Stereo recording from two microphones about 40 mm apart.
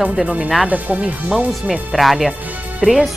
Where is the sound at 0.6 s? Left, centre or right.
Right.